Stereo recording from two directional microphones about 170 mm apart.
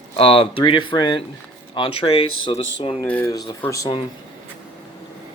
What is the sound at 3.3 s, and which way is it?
Speech, 25° left (ahead or behind).